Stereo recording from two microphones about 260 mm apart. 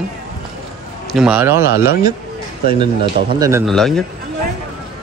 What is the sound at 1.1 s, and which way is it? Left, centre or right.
Speech, centre.